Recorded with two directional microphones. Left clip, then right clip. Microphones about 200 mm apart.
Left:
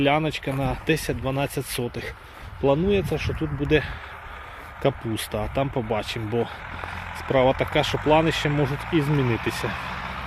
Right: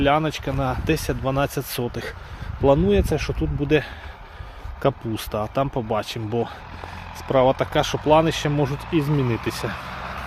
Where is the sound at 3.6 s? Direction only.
10° right (ahead or behind).